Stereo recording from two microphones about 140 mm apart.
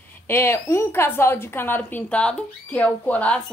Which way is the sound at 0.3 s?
20° left (ahead or behind).